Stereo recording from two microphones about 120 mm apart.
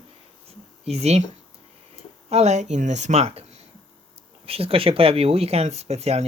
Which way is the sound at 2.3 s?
65° right (ahead or behind).